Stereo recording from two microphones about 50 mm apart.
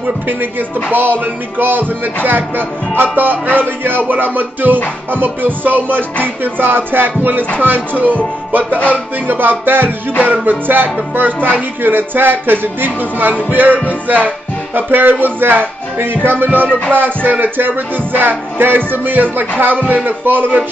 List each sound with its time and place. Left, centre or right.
0.0 s music: right
8.7 s music: left
9.3 s music: right